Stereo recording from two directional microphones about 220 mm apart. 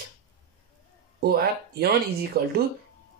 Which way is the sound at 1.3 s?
45° right (ahead or behind).